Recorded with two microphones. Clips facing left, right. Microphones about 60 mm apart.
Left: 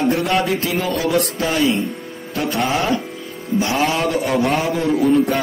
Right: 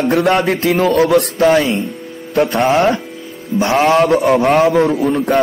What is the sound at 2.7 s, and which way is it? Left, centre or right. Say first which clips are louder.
Speech: right 6 dB; right.